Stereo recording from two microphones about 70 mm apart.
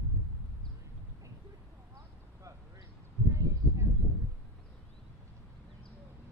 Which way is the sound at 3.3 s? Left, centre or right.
Right.